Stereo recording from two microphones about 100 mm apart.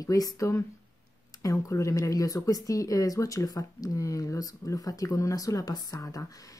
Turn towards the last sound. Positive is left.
turn(degrees=35)  # may be behind; listen again after turning